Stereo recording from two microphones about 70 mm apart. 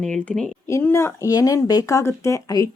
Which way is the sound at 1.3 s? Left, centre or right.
Left.